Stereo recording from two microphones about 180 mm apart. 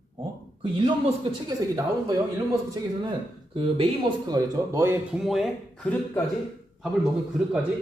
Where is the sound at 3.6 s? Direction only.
30° right (ahead or behind).